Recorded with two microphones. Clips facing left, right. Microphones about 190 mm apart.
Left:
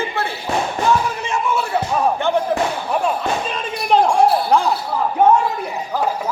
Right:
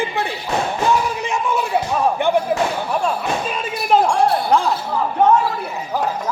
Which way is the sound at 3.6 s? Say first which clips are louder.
Left 1 dB; centre (ahead or behind).